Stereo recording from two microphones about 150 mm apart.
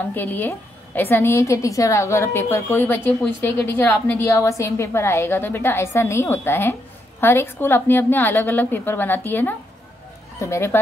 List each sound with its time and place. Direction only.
0.1 s a woman's voice: 10° left (ahead or behind)